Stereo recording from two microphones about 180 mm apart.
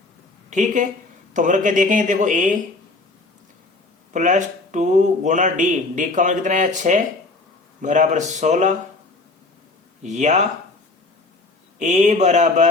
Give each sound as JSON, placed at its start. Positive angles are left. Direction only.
{"t": 0.5, "sound": "a man's voice", "side_deg": -45}
{"t": 4.1, "sound": "a man's voice", "side_deg": -45}
{"t": 10.0, "sound": "speech", "side_deg": -40}
{"t": 11.8, "sound": "speech", "side_deg": -40}